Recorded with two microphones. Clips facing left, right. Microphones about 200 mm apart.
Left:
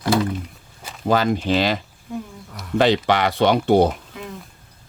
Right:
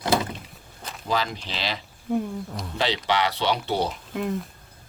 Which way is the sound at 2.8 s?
50° left (ahead or behind).